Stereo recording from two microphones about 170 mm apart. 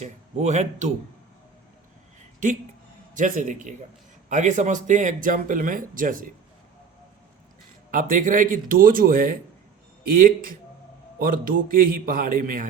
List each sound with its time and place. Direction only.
0.0 s speech: 40° right (ahead or behind)
3.2 s speech: 50° right (ahead or behind)
7.9 s speech: 50° right (ahead or behind)